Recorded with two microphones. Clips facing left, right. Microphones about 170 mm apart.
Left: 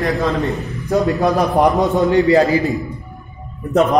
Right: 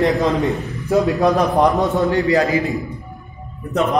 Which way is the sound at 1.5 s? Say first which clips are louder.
Left 2 dB; 20° left (ahead or behind).